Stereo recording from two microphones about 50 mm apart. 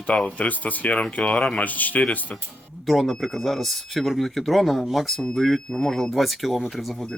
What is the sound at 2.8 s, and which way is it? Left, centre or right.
Speech, centre.